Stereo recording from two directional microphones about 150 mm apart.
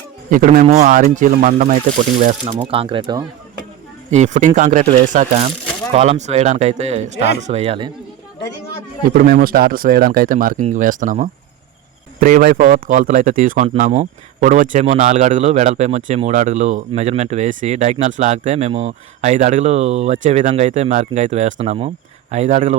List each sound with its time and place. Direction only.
0.3 s speech: 65° right (ahead or behind)
2.6 s speech: 40° right (ahead or behind)
4.1 s speech: 50° right (ahead or behind)
5.9 s a man's voice: 45° right (ahead or behind)
9.0 s speech: 70° right (ahead or behind)
12.2 s a man's voice: 80° right; by 22.8 s 55° right (ahead or behind)